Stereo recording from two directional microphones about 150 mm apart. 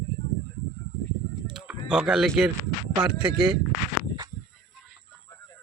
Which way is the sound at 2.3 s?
5° right (ahead or behind).